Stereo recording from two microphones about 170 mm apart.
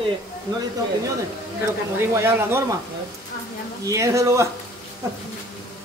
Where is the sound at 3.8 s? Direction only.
20° right (ahead or behind).